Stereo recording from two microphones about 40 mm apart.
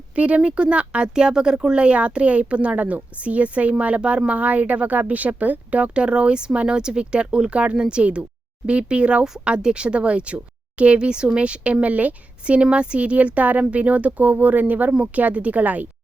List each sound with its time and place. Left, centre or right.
0.2 s a woman's voice: right
12.7 s a woman's voice: right